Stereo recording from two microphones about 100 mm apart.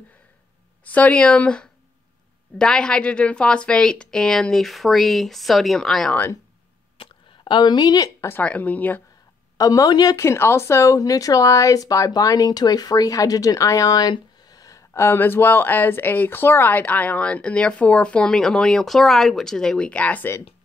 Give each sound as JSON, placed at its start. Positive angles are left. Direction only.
{"t": 0.8, "sound": "speech", "side_deg": 15}
{"t": 7.0, "sound": "a sound", "side_deg": 50}
{"t": 8.2, "sound": "speech", "side_deg": 25}
{"t": 9.6, "sound": "speech", "side_deg": 35}
{"t": 10.1, "sound": "speech", "side_deg": 25}
{"t": 14.4, "sound": "a sound", "side_deg": 40}
{"t": 15.0, "sound": "speech", "side_deg": 20}